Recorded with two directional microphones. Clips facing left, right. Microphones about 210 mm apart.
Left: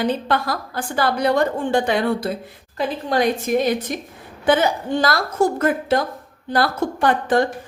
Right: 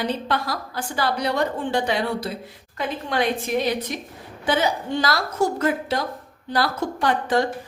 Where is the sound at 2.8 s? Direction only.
40° left (ahead or behind).